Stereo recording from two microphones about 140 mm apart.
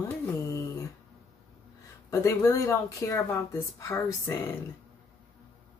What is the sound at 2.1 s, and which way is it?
Speech, 25° left (ahead or behind).